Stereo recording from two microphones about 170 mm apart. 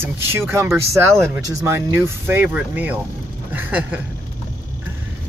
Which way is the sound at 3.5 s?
10° right (ahead or behind).